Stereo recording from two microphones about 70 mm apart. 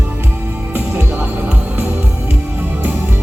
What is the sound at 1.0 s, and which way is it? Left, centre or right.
Music, right.